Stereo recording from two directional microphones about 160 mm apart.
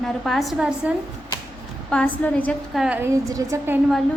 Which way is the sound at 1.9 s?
10° left (ahead or behind).